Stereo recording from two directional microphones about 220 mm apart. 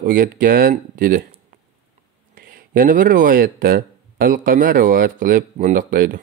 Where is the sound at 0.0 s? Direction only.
40° right (ahead or behind).